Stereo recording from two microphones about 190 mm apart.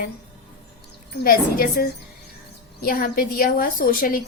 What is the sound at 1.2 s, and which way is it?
Speech, 50° left (ahead or behind).